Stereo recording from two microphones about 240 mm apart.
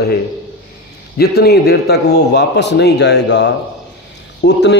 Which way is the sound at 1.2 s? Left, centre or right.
Left.